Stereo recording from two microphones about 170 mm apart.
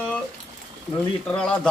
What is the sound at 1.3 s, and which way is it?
Speech, 5° left (ahead or behind).